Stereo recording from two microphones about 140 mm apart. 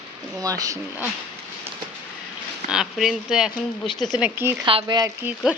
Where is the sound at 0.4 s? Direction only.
25° right (ahead or behind).